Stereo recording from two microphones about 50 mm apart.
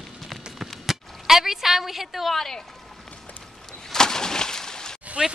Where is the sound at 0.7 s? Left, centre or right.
Centre.